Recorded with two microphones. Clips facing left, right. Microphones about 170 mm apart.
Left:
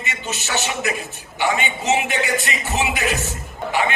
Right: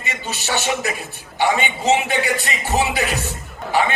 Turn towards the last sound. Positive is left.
turn(degrees=-35)  # may be behind; listen again after turning